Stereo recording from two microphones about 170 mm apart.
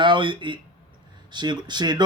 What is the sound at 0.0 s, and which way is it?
Speech, 30° right (ahead or behind).